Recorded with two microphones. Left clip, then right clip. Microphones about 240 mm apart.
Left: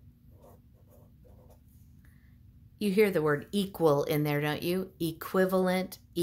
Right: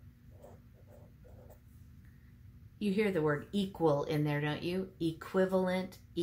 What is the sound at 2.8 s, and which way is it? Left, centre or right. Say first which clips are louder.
Speech: left 6 dB; left.